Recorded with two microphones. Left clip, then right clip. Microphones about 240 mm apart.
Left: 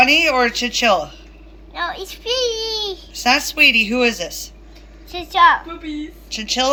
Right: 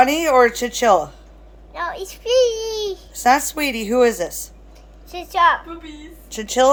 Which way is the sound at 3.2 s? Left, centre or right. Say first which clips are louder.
Left 3 dB; right.